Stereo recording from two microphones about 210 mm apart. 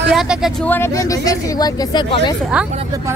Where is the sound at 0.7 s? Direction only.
10° left (ahead or behind).